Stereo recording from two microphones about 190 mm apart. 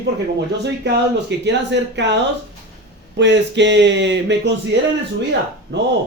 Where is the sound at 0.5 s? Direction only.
65° right (ahead or behind).